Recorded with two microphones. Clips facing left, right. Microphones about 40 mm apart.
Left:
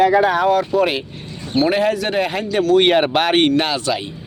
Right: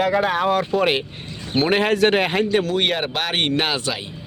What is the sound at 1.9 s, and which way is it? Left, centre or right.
Speech, right.